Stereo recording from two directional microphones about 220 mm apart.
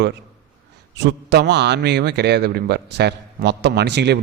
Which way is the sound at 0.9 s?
50° right (ahead or behind).